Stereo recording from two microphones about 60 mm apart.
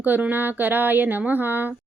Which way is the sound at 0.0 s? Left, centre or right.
Right.